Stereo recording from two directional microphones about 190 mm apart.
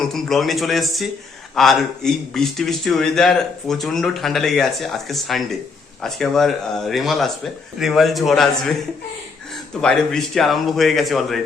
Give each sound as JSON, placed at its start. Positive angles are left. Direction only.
{"t": 0.0, "sound": "a man's voice", "side_deg": 0}
{"t": 9.8, "sound": "a man's voice", "side_deg": 5}